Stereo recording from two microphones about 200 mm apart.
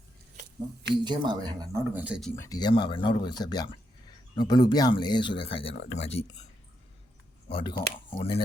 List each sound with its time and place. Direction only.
1.0 s speech: 20° right (ahead or behind); by 2.3 s 5° right (ahead or behind)
2.3 s speech: 15° left (ahead or behind); by 6.2 s 30° left (ahead or behind)
7.4 s speech: 25° left (ahead or behind)